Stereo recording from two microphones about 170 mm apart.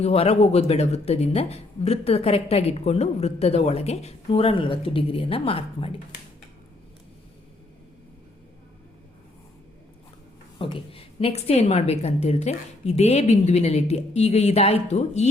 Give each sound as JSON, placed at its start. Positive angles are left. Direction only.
{"t": 0.0, "sound": "speech", "side_deg": 40}
{"t": 10.6, "sound": "speech", "side_deg": 30}